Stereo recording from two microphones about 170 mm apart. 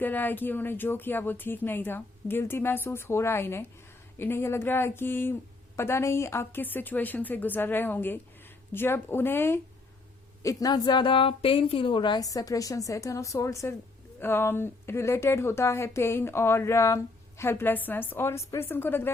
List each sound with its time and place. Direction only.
0.0 s a woman's voice: 10° left (ahead or behind)